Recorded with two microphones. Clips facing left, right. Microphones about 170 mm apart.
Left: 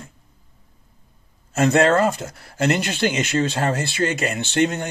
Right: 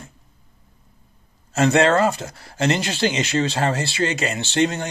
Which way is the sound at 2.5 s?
55° left (ahead or behind).